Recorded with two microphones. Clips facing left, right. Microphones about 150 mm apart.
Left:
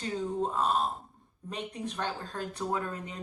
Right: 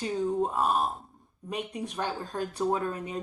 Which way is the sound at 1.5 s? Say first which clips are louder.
Right 3 dB; 15° right (ahead or behind).